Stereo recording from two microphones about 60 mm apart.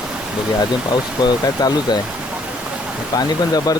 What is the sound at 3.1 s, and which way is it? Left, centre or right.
Speech, left.